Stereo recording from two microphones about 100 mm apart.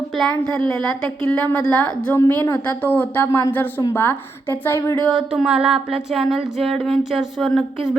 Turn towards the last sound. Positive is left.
turn(degrees=0)  # may be behind; listen again after turning